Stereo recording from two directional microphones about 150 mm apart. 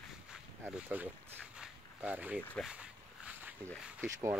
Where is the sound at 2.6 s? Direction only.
10° right (ahead or behind).